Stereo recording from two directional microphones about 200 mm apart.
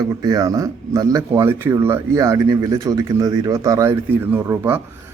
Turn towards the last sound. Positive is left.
turn(degrees=-10)  # may be behind; listen again after turning